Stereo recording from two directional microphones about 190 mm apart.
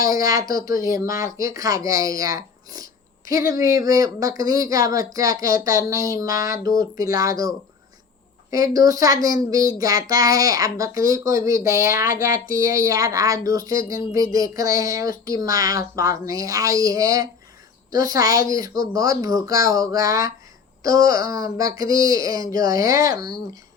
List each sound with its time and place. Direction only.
0.1 s a child's voice: 20° right (ahead or behind)